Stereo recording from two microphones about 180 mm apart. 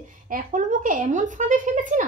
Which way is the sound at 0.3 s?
45° right (ahead or behind).